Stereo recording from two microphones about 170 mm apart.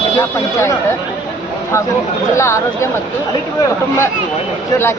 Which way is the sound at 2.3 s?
15° left (ahead or behind).